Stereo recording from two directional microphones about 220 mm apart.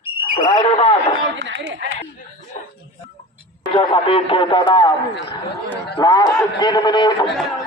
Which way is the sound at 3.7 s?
25° left (ahead or behind).